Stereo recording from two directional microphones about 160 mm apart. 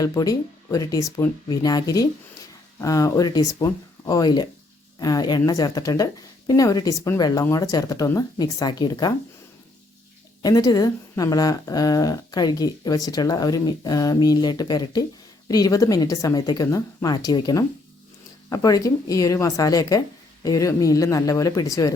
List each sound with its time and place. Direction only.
0.0 s speech: 20° left (ahead or behind)
10.4 s speech: 25° left (ahead or behind)